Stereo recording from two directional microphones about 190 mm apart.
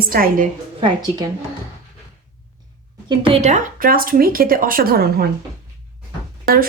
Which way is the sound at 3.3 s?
35° right (ahead or behind).